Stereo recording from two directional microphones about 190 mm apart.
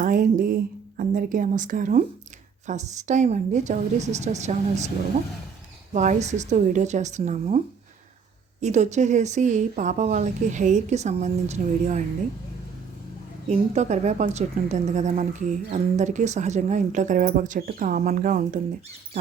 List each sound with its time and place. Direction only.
0.0 s speech: 45° right (ahead or behind)
5.9 s speech: 40° right (ahead or behind)
8.6 s speech: 35° right (ahead or behind)
13.5 s speech: 35° right (ahead or behind)